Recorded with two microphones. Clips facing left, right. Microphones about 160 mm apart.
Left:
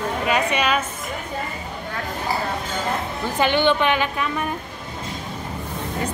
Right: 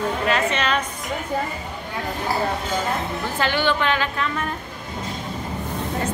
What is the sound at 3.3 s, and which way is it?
A woman's voice, 20° left (ahead or behind).